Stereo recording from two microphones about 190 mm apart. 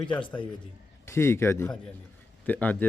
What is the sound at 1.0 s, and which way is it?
Speech, 15° left (ahead or behind).